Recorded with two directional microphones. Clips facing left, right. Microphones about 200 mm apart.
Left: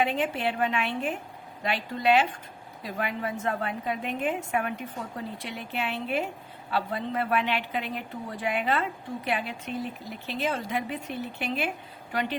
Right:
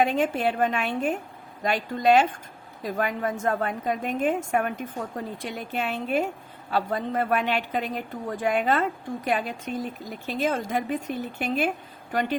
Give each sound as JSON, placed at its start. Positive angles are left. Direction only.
{"t": 0.0, "sound": "a woman's voice", "side_deg": -45}